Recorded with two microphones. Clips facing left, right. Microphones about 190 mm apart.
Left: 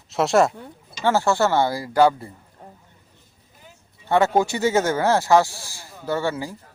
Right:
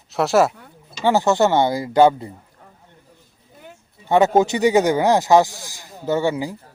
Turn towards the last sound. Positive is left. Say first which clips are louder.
# right 4 dB
turn(degrees=-15)  # may be behind; listen again after turning